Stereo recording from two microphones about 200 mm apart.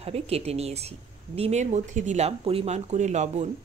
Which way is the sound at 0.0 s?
30° right (ahead or behind).